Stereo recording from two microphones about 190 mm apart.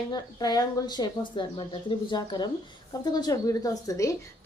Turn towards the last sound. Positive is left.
turn(degrees=15)  # may be behind; listen again after turning